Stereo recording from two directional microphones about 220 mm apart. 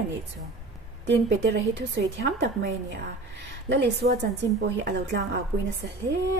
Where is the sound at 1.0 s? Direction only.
50° right (ahead or behind).